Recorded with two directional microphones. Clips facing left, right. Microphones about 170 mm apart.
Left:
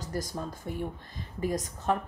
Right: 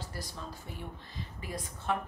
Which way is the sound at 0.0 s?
45° left (ahead or behind).